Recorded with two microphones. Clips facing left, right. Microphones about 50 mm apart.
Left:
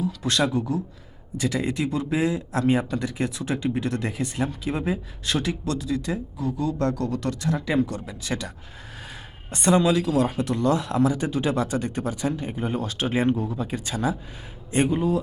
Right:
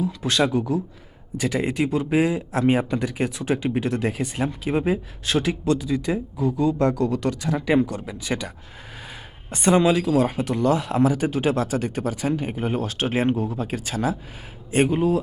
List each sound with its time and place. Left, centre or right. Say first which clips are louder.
0.0 s speech: right 2 dB; centre
7.5 s speech: right 4 dB; right; by 15.2 s centre